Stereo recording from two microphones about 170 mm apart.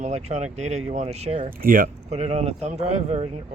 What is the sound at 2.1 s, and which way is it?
Speech, 40° right (ahead or behind).